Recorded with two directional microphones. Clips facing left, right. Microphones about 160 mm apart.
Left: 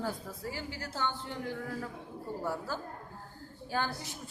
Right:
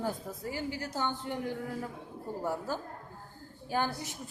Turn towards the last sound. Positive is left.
turn(degrees=-15)  # may be behind; listen again after turning